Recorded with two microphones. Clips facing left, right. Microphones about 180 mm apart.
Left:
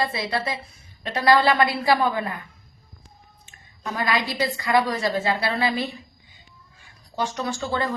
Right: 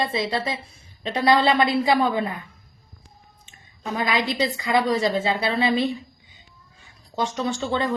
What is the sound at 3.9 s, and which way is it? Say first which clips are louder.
A woman's voice: right 1 dB; 20° right (ahead or behind).